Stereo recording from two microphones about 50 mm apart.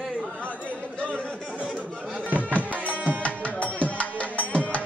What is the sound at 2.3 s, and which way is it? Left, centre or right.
Music, right.